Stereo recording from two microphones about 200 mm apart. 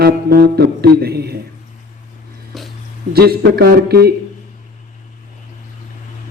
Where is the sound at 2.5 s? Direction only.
Centre (ahead or behind).